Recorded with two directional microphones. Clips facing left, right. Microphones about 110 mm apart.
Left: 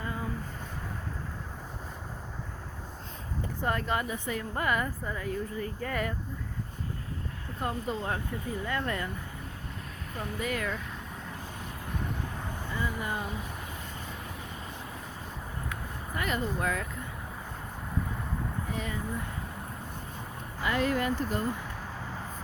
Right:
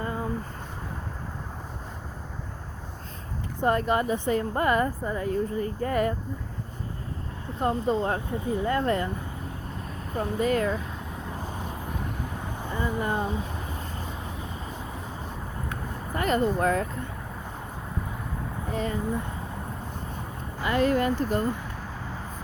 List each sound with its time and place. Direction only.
0.0 s a sound: 35° right (ahead or behind)
3.6 s speech: 25° right (ahead or behind)
7.6 s speech: 30° right (ahead or behind)
10.2 s speech: 35° right (ahead or behind)
12.7 s vehicle: 35° right (ahead or behind)
15.7 s vehicle: 40° right (ahead or behind)
18.7 s speech: 40° right (ahead or behind)
20.7 s speech: 35° right (ahead or behind)